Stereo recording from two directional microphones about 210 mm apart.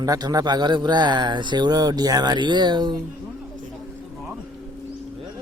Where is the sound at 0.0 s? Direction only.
15° right (ahead or behind).